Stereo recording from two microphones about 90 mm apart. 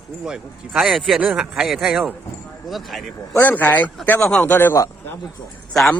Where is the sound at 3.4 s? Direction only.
20° left (ahead or behind).